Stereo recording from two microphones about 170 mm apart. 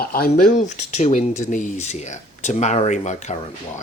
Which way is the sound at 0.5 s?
45° left (ahead or behind).